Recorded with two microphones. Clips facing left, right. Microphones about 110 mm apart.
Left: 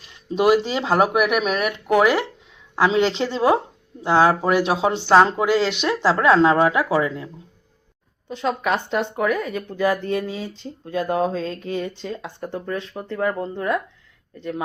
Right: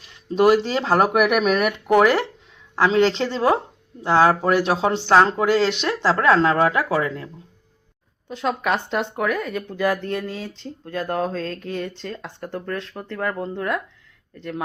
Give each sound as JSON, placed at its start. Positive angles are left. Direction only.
{"t": 0.3, "sound": "speech", "side_deg": 10}
{"t": 8.3, "sound": "speech", "side_deg": 0}